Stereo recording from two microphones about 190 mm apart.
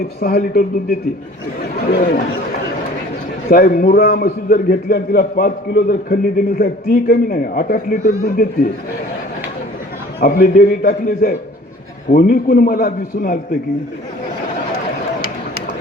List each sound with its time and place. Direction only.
0.2 s speech: 55° left (ahead or behind)
1.9 s a man's voice: 45° left (ahead or behind)
3.5 s a man's voice: 50° left (ahead or behind)
10.2 s a man's voice: 55° left (ahead or behind)